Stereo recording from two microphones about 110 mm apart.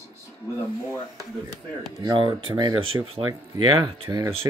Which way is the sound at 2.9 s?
30° right (ahead or behind).